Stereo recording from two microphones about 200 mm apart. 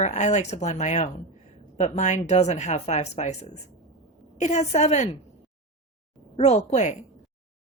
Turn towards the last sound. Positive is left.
turn(degrees=35)  # may be behind; listen again after turning